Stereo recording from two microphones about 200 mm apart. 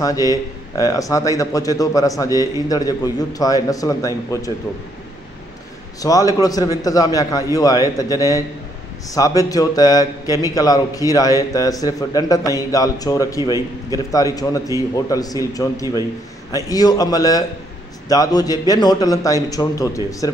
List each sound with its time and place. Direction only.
0.0 s a man's voice: 15° left (ahead or behind)
5.9 s a man's voice: 15° left (ahead or behind)